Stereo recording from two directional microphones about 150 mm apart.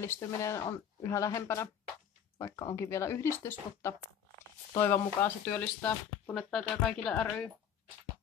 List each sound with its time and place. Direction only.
0.0 s speech: 15° left (ahead or behind)